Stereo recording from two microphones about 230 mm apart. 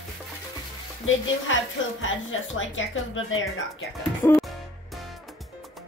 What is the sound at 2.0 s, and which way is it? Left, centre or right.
Speech, left.